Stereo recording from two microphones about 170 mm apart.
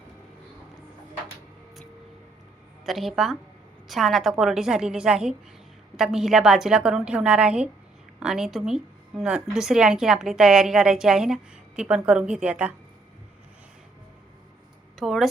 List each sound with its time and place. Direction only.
2.8 s a woman's voice: centre (ahead or behind)
14.9 s speech: centre (ahead or behind)